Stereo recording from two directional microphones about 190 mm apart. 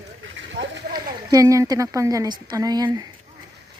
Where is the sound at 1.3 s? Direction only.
15° right (ahead or behind).